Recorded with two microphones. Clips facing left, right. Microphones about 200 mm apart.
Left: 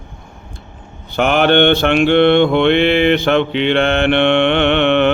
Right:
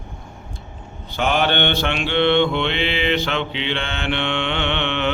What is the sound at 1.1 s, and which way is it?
Mantra, 55° left (ahead or behind).